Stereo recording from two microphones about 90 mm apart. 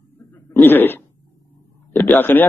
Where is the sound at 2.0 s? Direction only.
20° left (ahead or behind).